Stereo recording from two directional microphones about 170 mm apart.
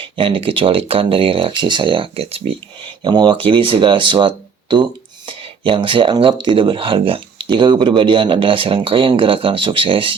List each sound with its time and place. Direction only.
0.0 s speech: 30° right (ahead or behind)